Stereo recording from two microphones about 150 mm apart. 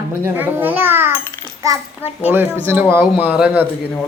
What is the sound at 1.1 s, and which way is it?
Speech, 15° left (ahead or behind).